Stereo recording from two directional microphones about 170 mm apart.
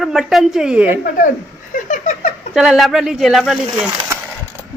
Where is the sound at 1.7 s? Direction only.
45° left (ahead or behind).